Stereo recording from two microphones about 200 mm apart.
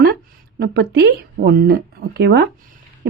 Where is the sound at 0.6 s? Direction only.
50° right (ahead or behind).